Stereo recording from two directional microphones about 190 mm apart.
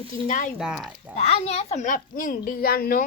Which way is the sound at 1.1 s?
35° left (ahead or behind).